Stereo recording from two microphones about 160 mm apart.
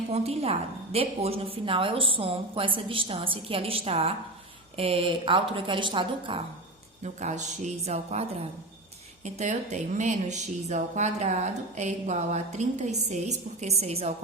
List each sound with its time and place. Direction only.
0.1 s a woman's voice: 40° right (ahead or behind)
7.0 s speech: 45° right (ahead or behind)
9.2 s speech: 45° right (ahead or behind)